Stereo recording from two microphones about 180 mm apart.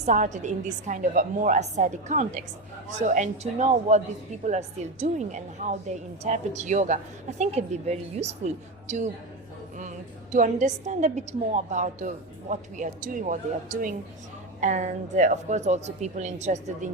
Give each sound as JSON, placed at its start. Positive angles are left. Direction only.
{"t": 0.0, "sound": "a woman's voice", "side_deg": -40}
{"t": 10.3, "sound": "a woman's voice", "side_deg": -45}